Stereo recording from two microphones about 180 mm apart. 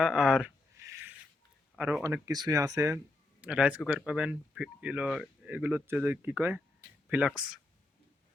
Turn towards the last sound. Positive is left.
turn(degrees=-5)  # may be behind; listen again after turning